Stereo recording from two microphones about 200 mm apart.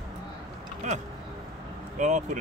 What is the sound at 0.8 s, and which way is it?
Speech, 35° right (ahead or behind).